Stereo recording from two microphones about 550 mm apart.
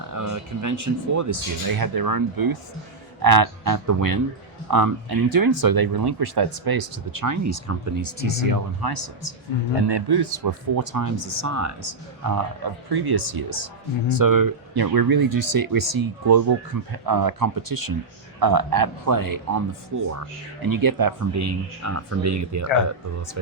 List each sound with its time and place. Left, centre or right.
0.1 s speech: right
7.2 s speech: right
14.3 s speech: right
22.9 s speech: right